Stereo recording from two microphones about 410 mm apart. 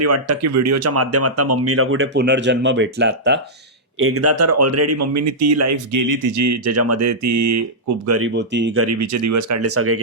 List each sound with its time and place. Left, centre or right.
0.0 s speech: right